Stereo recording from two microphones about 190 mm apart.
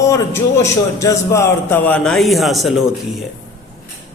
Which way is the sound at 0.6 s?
15° left (ahead or behind).